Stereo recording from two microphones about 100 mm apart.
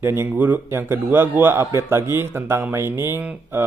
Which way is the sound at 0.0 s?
25° right (ahead or behind).